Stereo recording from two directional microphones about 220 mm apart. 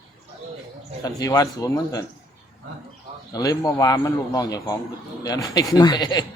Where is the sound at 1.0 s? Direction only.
15° left (ahead or behind).